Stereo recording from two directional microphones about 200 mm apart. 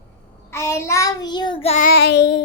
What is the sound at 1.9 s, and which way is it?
Child singing, 55° left (ahead or behind).